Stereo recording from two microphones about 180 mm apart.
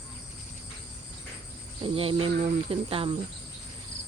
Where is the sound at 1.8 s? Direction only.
30° right (ahead or behind).